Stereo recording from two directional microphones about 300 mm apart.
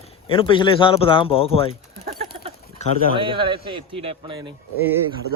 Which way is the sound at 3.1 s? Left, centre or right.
Centre.